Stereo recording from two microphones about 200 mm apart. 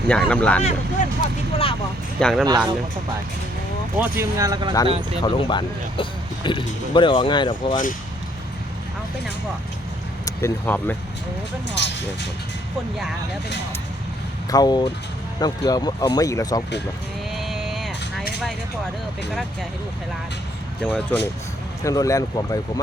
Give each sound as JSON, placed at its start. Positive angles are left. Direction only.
{"t": 0.1, "sound": "speech", "side_deg": 5}
{"t": 0.6, "sound": "speech", "side_deg": 35}
{"t": 2.2, "sound": "speech", "side_deg": 5}
{"t": 3.9, "sound": "speech", "side_deg": -10}
{"t": 5.2, "sound": "speech", "side_deg": 25}
{"t": 10.2, "sound": "speech", "side_deg": 10}
{"t": 11.8, "sound": "speech", "side_deg": 60}
{"t": 14.5, "sound": "speech", "side_deg": 20}
{"t": 17.3, "sound": "vehicle", "side_deg": 0}
{"t": 20.8, "sound": "speech", "side_deg": 5}